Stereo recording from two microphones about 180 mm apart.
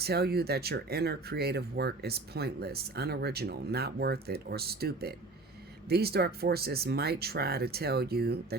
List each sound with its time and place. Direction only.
0.0 s speech: 60° right (ahead or behind)